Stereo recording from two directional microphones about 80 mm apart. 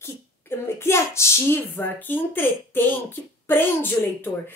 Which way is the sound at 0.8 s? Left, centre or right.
Left.